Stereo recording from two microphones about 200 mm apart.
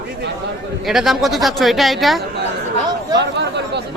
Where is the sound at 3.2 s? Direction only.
60° right (ahead or behind).